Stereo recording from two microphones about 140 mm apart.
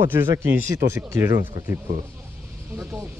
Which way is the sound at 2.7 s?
5° right (ahead or behind).